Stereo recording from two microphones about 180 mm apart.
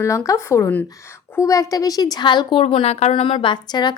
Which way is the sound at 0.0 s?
15° left (ahead or behind).